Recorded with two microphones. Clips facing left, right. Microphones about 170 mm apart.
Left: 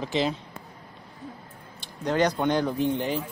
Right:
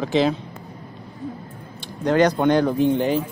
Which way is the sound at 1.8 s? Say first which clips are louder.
Right 6 dB; 70° right (ahead or behind).